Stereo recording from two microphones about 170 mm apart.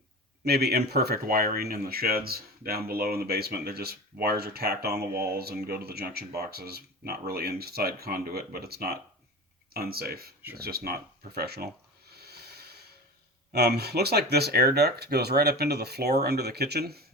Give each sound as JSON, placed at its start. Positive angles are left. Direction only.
{"t": 0.4, "sound": "speech", "side_deg": -70}
{"t": 12.1, "sound": "snort", "side_deg": -70}
{"t": 13.5, "sound": "speech", "side_deg": -70}